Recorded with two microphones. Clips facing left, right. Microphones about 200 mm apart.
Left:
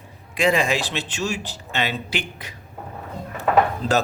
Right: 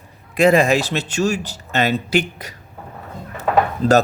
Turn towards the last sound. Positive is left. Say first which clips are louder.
# right 7 dB
turn(degrees=-40)  # may be behind; listen again after turning